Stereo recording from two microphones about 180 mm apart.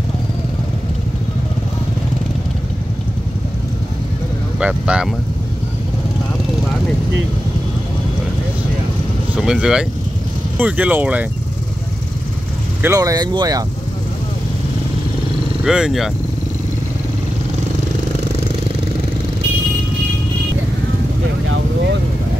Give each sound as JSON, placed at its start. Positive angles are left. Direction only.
{"t": 4.6, "sound": "speech", "side_deg": -5}
{"t": 9.4, "sound": "speech", "side_deg": -5}
{"t": 12.8, "sound": "speech", "side_deg": -15}
{"t": 15.6, "sound": "speech", "side_deg": -5}